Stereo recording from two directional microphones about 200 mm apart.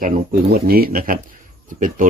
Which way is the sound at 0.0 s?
45° right (ahead or behind).